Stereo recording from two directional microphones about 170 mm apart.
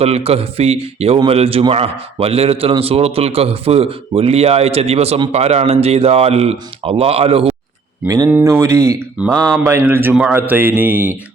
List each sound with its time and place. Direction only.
0.0 s speech: 35° right (ahead or behind)
8.0 s speech: 20° right (ahead or behind)